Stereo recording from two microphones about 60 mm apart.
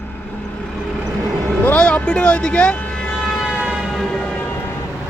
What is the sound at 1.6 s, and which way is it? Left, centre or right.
Vehicle, left.